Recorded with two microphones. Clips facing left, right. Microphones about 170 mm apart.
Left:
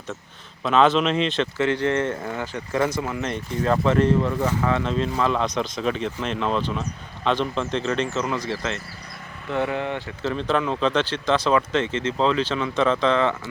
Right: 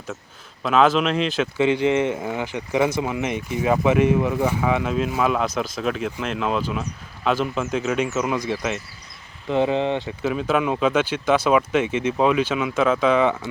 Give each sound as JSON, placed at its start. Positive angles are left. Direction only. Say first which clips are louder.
{"t": 0.6, "sound": "speech", "louder": "right 1 dB", "side_deg": -5}
{"t": 1.5, "sound": "speech", "louder": "right 5 dB", "side_deg": -15}
{"t": 10.2, "sound": "speech", "louder": "right 2 dB", "side_deg": -10}